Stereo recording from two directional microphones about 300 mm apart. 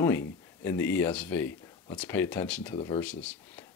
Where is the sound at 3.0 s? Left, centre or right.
Centre.